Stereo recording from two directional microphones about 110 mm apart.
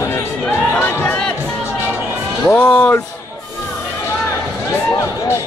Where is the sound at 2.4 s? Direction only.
15° left (ahead or behind).